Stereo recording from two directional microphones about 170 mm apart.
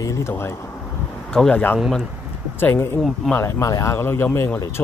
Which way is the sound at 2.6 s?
10° left (ahead or behind).